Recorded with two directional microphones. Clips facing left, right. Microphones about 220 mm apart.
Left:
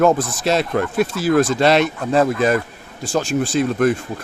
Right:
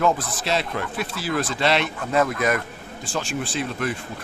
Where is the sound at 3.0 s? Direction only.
40° left (ahead or behind).